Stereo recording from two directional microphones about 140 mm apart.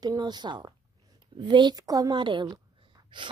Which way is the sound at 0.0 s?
30° right (ahead or behind).